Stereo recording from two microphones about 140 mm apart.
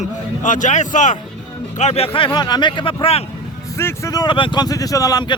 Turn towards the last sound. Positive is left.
turn(degrees=25)  # may be behind; listen again after turning